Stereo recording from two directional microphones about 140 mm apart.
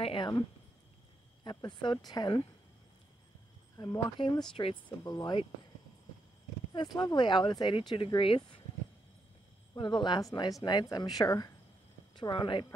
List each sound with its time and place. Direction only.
0.0 s speech: 40° left (ahead or behind)
1.4 s speech: 30° left (ahead or behind)
3.7 s a woman's voice: 25° left (ahead or behind)
6.7 s speech: 30° left (ahead or behind)
9.8 s a woman's voice: 35° left (ahead or behind)